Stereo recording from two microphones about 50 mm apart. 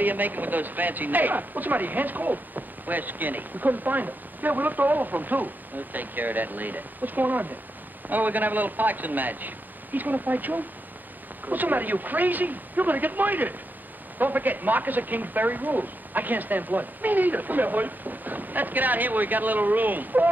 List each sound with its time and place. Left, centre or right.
0.0 s speech: right